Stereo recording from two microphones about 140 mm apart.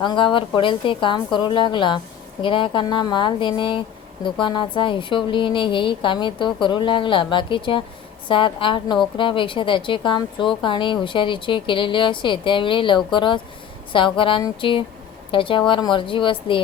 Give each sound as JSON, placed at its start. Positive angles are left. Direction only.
{"t": 0.0, "sound": "speech", "side_deg": 35}